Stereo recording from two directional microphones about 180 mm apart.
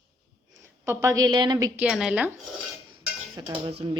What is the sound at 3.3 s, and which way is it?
Speech, 20° right (ahead or behind).